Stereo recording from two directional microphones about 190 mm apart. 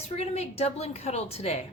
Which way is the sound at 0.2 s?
35° left (ahead or behind).